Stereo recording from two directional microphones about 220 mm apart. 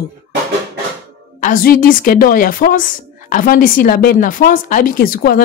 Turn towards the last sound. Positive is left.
turn(degrees=40)  # may be behind; listen again after turning